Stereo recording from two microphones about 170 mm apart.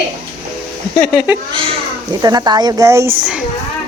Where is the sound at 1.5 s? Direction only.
30° right (ahead or behind).